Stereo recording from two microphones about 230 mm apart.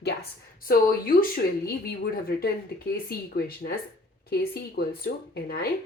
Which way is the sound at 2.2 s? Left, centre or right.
Left.